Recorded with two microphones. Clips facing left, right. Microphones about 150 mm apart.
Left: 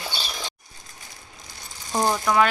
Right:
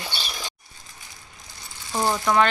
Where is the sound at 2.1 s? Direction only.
Centre (ahead or behind).